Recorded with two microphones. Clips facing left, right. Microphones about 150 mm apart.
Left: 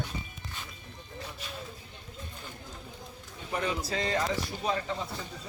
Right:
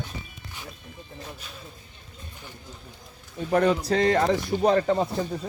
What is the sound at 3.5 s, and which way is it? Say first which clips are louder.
Speech: right 11 dB; 60° right (ahead or behind).